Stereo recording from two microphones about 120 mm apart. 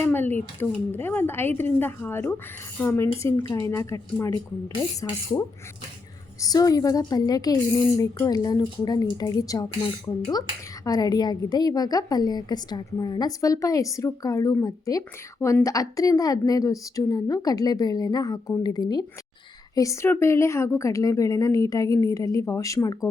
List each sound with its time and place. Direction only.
0.0 s a woman's voice: 15° left (ahead or behind)
6.4 s a woman's voice: 30° left (ahead or behind)